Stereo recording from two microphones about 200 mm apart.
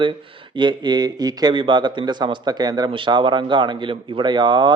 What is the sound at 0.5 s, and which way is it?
A man's voice, 25° right (ahead or behind).